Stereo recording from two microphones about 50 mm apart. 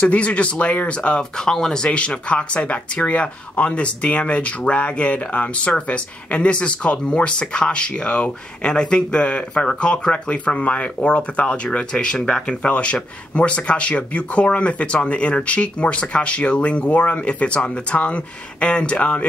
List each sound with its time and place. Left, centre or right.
0.0 s speech: left
1.9 s speech: left